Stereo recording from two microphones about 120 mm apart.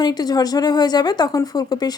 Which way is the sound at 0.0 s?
35° left (ahead or behind).